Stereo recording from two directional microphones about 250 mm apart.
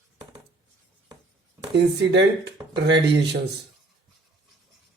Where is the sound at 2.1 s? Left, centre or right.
Right.